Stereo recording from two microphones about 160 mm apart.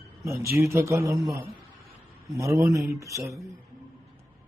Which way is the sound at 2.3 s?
20° right (ahead or behind).